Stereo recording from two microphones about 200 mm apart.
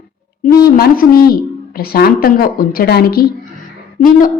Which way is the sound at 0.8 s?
50° left (ahead or behind).